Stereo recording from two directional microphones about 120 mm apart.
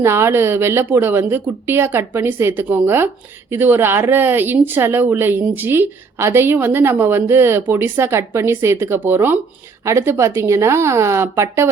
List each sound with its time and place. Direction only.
0.0 s speech: 20° right (ahead or behind)